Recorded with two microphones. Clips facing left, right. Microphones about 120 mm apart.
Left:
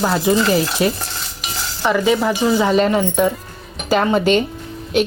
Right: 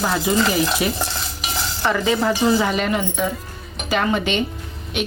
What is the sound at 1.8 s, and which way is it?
Cutlery, 15° left (ahead or behind).